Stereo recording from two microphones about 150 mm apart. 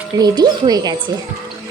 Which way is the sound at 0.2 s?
25° right (ahead or behind).